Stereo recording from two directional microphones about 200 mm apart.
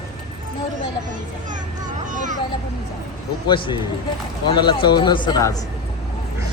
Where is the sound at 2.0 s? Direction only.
40° right (ahead or behind).